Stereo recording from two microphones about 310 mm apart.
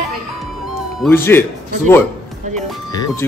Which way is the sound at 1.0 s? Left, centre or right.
Centre.